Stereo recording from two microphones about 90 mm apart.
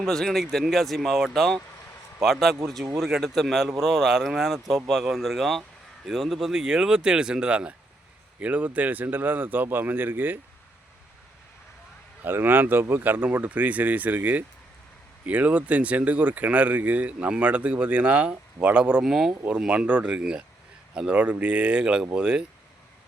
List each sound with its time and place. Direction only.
0.0 s a man's voice: 5° left (ahead or behind); by 10.4 s 20° right (ahead or behind)
12.2 s speech: 25° right (ahead or behind)